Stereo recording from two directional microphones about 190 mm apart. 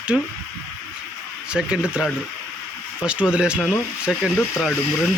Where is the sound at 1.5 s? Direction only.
5° right (ahead or behind).